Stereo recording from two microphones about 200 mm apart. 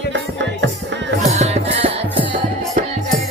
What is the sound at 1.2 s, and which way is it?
Music, 35° right (ahead or behind).